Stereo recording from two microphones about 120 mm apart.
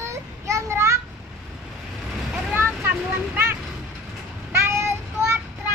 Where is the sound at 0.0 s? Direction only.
25° right (ahead or behind).